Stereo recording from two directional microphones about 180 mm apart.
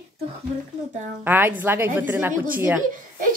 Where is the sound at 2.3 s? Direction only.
50° right (ahead or behind).